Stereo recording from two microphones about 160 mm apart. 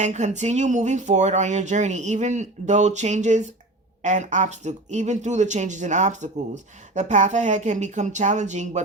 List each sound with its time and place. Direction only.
0.0 s speech: 50° right (ahead or behind)